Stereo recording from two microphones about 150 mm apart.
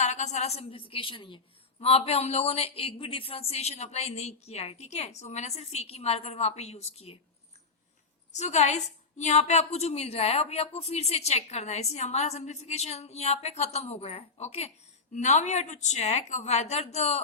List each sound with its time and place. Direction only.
0.0 s a woman's voice: 50° left (ahead or behind)
8.3 s a woman's voice: 50° left (ahead or behind)